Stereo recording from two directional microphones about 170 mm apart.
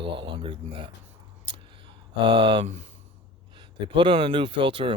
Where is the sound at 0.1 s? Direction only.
30° right (ahead or behind).